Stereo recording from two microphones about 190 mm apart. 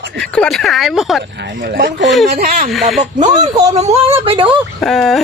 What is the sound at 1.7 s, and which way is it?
Speech, 65° right (ahead or behind).